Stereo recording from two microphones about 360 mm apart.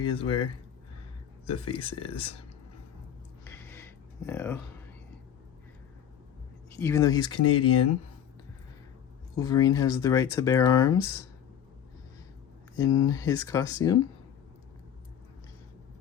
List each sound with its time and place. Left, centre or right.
0.0 s speech: centre
1.5 s speech: centre
3.4 s a sound: centre
6.7 s speech: centre
7.5 s speech: left
9.3 s speech: centre
12.7 s speech: centre